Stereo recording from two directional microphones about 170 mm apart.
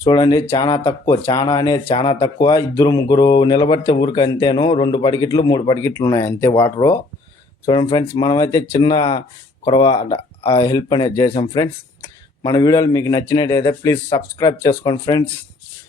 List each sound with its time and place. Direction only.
0.0 s speech: 25° left (ahead or behind)
7.6 s speech: 30° left (ahead or behind)